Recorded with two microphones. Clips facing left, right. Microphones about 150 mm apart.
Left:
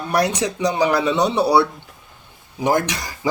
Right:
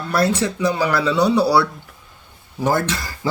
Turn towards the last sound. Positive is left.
turn(degrees=15)  # may be behind; listen again after turning